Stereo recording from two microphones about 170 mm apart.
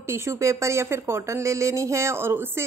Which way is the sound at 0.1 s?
15° right (ahead or behind).